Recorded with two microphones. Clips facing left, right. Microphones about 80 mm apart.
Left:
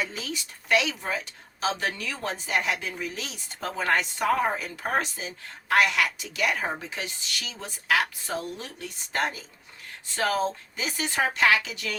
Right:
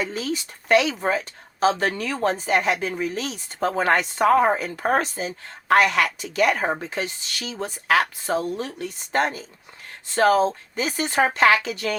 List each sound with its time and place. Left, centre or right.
0.0 s speech: right